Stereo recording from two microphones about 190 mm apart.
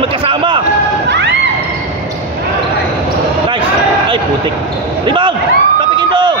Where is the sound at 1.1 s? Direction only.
65° right (ahead or behind).